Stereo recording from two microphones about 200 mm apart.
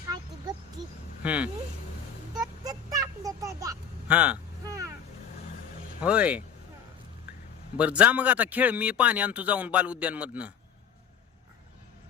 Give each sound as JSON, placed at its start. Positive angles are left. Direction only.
{"t": 1.2, "sound": "speech", "side_deg": -5}
{"t": 2.3, "sound": "vehicle", "side_deg": -20}
{"t": 6.0, "sound": "speech", "side_deg": -5}
{"t": 7.8, "sound": "speech", "side_deg": -5}